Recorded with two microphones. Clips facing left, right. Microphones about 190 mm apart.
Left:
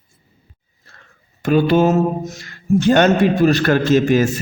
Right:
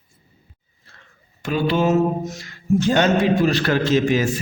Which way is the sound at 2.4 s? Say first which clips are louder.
Left 4 dB; 60° left (ahead or behind).